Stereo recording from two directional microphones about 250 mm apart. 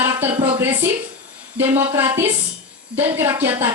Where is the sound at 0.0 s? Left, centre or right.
Centre.